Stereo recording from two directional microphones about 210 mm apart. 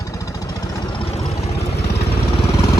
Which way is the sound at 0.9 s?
30° left (ahead or behind).